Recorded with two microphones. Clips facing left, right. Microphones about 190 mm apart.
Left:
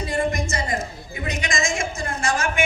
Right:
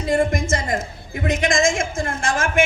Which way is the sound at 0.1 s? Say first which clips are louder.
Right 7 dB; 50° right (ahead or behind).